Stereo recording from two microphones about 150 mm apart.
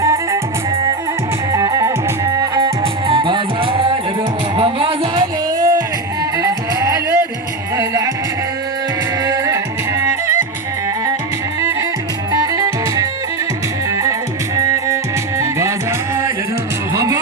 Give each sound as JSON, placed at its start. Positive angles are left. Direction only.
{"t": 0.0, "sound": "music", "side_deg": -20}
{"t": 1.5, "sound": "music", "side_deg": -20}
{"t": 2.8, "sound": "music", "side_deg": -35}
{"t": 9.2, "sound": "music", "side_deg": -20}
{"t": 12.3, "sound": "music", "side_deg": -25}
{"t": 16.9, "sound": "music", "side_deg": -20}